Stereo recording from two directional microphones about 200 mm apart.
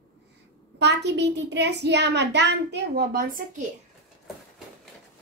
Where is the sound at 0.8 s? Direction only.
60° right (ahead or behind).